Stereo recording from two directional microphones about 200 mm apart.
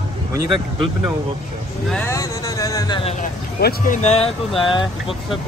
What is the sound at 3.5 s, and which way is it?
Speech, 45° left (ahead or behind).